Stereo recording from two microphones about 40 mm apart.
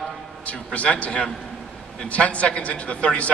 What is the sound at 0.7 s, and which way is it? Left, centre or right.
A man's voice, left.